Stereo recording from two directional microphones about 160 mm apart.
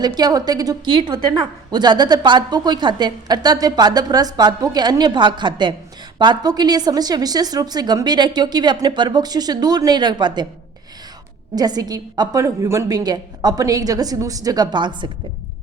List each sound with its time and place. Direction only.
0.0 s a woman's voice: 25° right (ahead or behind)
11.5 s a woman's voice: 25° right (ahead or behind)